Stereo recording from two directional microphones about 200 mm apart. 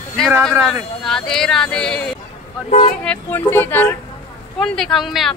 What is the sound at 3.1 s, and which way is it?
Speech, 10° left (ahead or behind).